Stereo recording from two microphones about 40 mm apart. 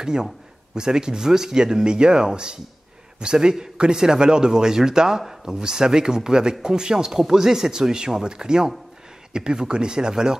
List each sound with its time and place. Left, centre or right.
0.0 s speech: centre